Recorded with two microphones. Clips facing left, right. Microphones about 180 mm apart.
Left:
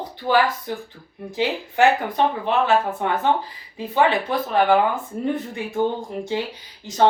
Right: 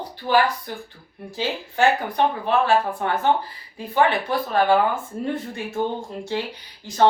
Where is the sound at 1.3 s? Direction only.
20° left (ahead or behind).